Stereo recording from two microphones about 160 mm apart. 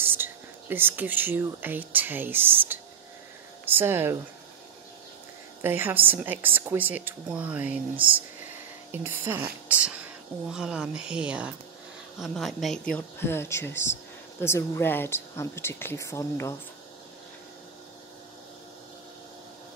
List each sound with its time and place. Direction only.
0.0 s a woman's voice: 15° right (ahead or behind)
5.6 s a woman's voice: 15° right (ahead or behind)
12.9 s speech: 15° left (ahead or behind)